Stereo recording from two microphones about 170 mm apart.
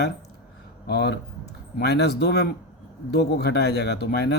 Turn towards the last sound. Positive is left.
turn(degrees=75)  # may be behind; listen again after turning